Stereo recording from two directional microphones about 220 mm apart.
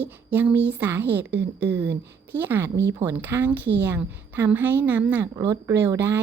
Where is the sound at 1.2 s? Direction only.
50° right (ahead or behind).